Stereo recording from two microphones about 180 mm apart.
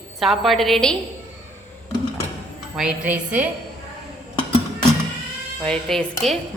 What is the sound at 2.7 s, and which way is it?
Speech, 5° right (ahead or behind).